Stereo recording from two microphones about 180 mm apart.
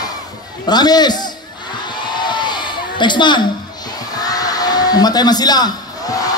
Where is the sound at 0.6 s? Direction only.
20° left (ahead or behind).